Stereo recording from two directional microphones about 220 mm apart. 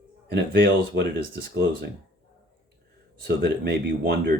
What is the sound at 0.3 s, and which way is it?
Speech, 50° right (ahead or behind).